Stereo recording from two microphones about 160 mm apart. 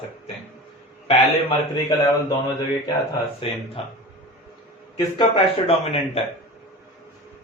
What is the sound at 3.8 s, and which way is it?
Speech, 35° left (ahead or behind).